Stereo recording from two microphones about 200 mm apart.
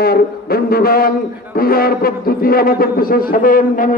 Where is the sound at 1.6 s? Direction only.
50° left (ahead or behind).